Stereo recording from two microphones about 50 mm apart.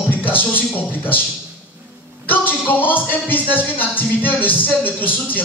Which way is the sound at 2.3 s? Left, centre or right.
Left.